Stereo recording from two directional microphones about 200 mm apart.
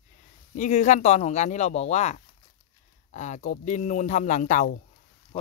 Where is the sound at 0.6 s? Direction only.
35° left (ahead or behind).